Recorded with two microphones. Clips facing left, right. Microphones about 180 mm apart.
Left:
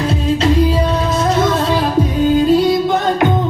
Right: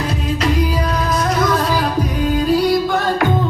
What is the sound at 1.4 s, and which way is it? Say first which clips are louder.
Music: left 2 dB; 25° left (ahead or behind).